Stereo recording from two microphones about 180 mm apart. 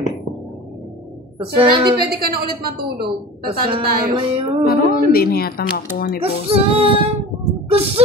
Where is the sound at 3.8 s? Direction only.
55° right (ahead or behind).